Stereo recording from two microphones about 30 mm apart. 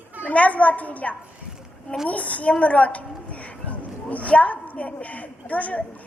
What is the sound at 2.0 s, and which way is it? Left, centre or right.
A woman's voice, left.